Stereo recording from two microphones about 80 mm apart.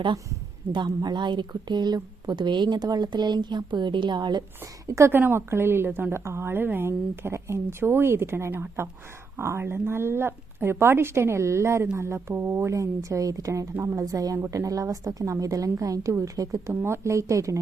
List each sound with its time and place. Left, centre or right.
0.7 s speech: right
4.9 s a woman's voice: right